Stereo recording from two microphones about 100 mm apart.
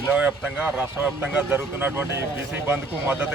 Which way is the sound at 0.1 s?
10° right (ahead or behind).